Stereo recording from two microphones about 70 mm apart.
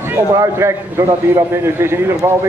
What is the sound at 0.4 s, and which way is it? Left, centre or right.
A man's voice, right.